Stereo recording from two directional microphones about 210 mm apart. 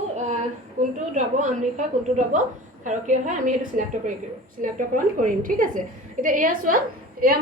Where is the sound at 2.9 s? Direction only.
35° right (ahead or behind).